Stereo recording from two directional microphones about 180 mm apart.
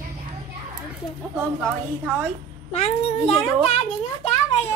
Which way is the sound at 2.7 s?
35° left (ahead or behind).